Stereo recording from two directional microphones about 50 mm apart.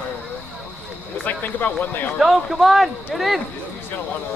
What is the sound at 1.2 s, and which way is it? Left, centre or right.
Speech, left.